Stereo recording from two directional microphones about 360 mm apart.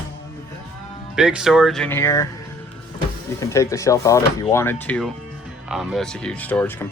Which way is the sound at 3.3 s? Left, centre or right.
Centre.